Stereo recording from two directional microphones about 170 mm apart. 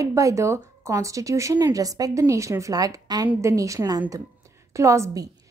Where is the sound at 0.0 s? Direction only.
20° right (ahead or behind).